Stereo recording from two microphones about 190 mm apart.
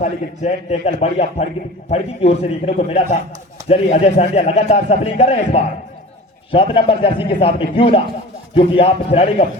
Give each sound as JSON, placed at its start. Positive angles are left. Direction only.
{"t": 0.0, "sound": "a man's voice", "side_deg": 35}